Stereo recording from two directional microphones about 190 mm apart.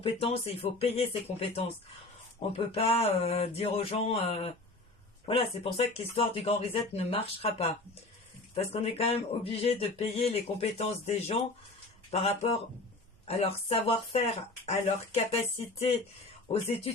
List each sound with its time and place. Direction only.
0.0 s speech: 30° left (ahead or behind)